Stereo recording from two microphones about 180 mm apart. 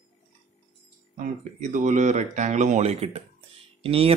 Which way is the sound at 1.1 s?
45° right (ahead or behind).